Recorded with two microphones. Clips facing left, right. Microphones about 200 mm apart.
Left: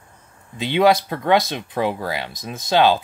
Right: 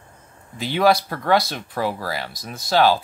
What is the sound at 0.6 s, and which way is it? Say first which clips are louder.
Speech: left 2 dB; 20° left (ahead or behind).